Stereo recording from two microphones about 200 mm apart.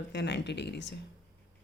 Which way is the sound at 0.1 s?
60° left (ahead or behind).